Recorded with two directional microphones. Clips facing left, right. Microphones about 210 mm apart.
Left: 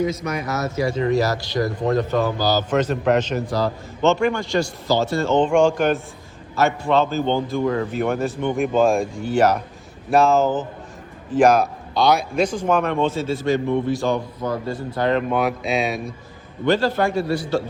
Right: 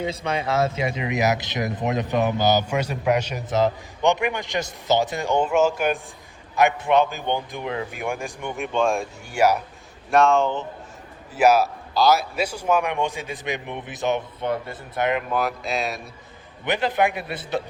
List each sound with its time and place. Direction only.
0.0 s speech: 30° right (ahead or behind); by 3.4 s 10° right (ahead or behind)
3.4 s speech: 20° right (ahead or behind)
8.5 s speech: centre (ahead or behind)
10.1 s speech: centre (ahead or behind); by 14.6 s 25° right (ahead or behind)
14.6 s speech: 30° left (ahead or behind)
14.9 s speech: 20° right (ahead or behind)
15.3 s speech: centre (ahead or behind)
16.6 s speech: 20° right (ahead or behind)